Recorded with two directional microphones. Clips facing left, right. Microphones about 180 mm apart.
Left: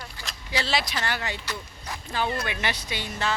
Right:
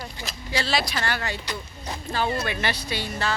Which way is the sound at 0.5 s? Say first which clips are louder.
Right 2 dB; 20° left (ahead or behind).